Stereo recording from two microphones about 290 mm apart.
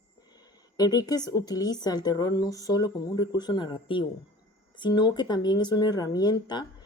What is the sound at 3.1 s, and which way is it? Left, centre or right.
Speech, left.